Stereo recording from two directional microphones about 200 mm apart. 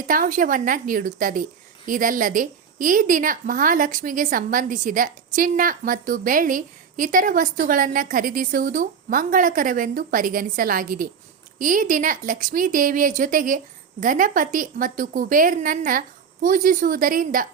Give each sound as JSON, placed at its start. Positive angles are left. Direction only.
{"t": 0.1, "sound": "a woman's voice", "side_deg": -45}